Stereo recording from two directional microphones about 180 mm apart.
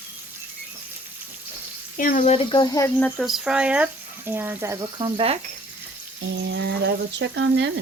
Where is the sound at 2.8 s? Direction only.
15° left (ahead or behind).